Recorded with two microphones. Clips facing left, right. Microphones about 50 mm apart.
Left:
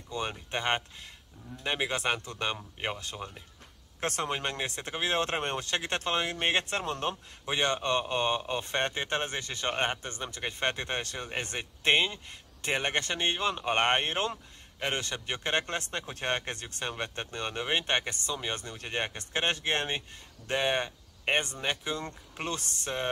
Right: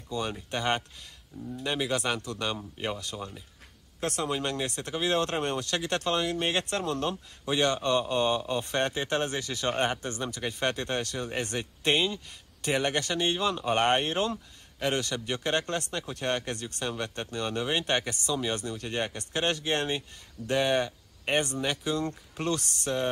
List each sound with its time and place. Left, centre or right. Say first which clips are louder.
0.1 s speech: right 2 dB; left
4.0 s speech: right 1 dB; left
4.3 s speech: right 2 dB; left